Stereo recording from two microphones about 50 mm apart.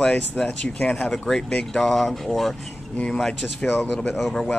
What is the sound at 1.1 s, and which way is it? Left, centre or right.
Speech, centre.